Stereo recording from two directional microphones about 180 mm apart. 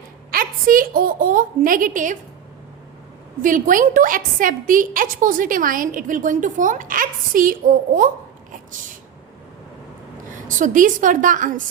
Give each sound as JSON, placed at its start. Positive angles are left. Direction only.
{"t": 0.3, "sound": "a woman's voice", "side_deg": -50}
{"t": 3.4, "sound": "a woman's voice", "side_deg": -45}
{"t": 10.3, "sound": "a woman's voice", "side_deg": -45}